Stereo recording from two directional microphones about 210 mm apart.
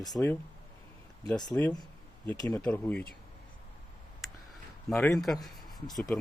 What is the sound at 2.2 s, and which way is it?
Speech, 10° left (ahead or behind).